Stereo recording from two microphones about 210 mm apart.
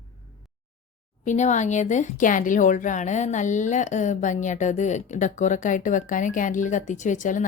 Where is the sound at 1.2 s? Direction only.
35° left (ahead or behind).